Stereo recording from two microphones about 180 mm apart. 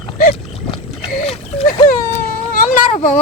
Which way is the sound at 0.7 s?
35° left (ahead or behind).